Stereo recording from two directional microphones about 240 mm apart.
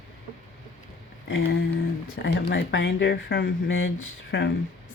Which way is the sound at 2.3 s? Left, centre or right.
Left.